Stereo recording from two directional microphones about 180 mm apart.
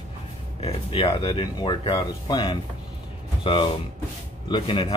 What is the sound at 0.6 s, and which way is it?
Speech, 35° left (ahead or behind).